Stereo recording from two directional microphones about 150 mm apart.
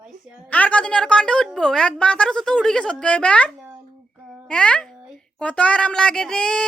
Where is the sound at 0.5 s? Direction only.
10° left (ahead or behind).